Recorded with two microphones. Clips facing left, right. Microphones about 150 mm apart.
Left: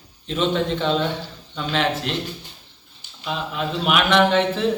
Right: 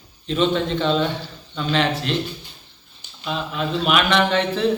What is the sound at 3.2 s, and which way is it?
Speech, 5° left (ahead or behind).